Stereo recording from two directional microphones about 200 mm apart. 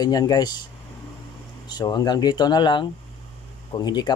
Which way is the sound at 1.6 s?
20° left (ahead or behind).